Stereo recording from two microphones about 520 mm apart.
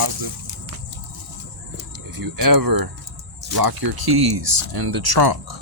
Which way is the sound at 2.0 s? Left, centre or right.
Right.